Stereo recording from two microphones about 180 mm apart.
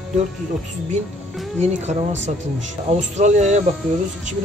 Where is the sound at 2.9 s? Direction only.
40° right (ahead or behind).